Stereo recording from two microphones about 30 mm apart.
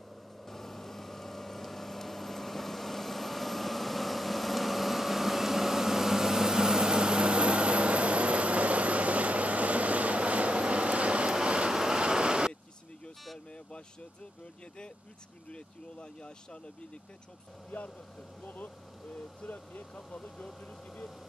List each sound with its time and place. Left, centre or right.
0.5 s vehicle: centre; by 11.7 s right
11.7 s vehicle: right
15.5 s speech: left
17.6 s speech: left
20.6 s speech: centre